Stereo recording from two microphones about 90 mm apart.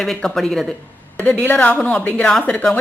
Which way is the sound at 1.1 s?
15° left (ahead or behind).